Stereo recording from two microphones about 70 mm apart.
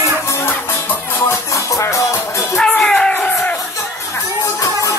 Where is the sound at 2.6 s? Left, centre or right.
Centre.